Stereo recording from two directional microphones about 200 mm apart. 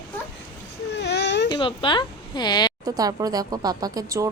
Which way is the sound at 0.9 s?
60° left (ahead or behind).